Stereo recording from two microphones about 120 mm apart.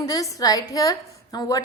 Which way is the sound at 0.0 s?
30° left (ahead or behind).